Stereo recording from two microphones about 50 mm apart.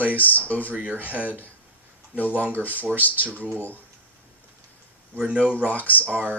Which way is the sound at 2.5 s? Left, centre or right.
Left.